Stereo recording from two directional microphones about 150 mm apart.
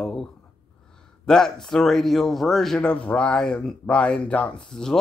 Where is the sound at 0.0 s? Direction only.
5° left (ahead or behind).